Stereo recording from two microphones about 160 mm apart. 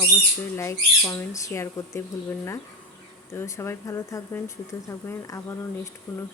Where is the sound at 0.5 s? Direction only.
15° left (ahead or behind).